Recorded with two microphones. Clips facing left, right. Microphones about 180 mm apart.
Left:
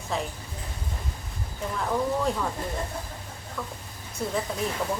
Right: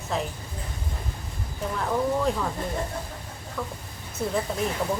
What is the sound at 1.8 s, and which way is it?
Speech, centre (ahead or behind).